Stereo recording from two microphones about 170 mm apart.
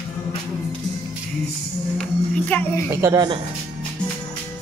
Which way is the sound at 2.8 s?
15° right (ahead or behind).